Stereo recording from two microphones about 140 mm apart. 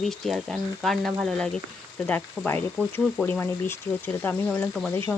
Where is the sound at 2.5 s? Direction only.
15° left (ahead or behind).